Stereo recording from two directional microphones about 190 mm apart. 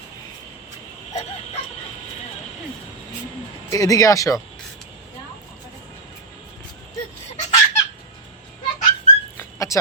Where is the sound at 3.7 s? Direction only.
15° left (ahead or behind).